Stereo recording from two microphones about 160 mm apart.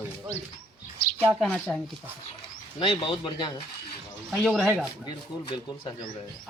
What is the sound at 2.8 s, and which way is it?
Speech, 35° left (ahead or behind).